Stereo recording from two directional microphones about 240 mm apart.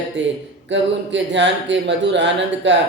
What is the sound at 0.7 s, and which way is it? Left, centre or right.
A man's voice, right.